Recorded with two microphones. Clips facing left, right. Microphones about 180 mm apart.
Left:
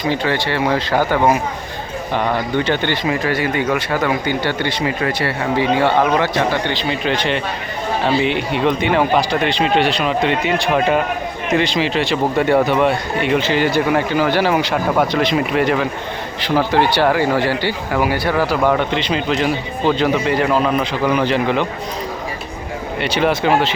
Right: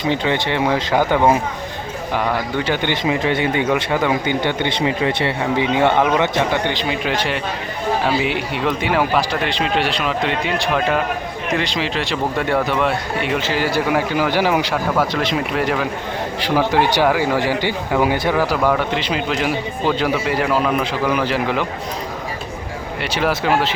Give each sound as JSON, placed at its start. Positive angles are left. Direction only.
{"t": 0.1, "sound": "speech", "side_deg": -20}
{"t": 2.9, "sound": "speech", "side_deg": -20}
{"t": 15.1, "sound": "speech", "side_deg": 0}
{"t": 16.4, "sound": "speech", "side_deg": -10}
{"t": 23.0, "sound": "speech", "side_deg": 0}